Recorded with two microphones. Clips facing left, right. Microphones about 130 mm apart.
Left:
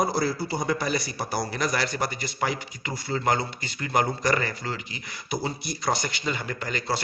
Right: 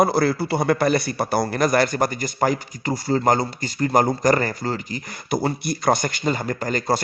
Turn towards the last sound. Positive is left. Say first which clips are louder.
# right 7 dB
turn(degrees=-40)  # may be behind; listen again after turning